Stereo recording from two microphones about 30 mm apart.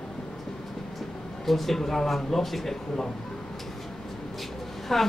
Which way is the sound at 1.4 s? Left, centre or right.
Centre.